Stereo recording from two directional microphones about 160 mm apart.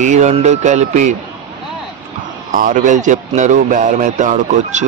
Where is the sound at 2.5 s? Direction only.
55° right (ahead or behind).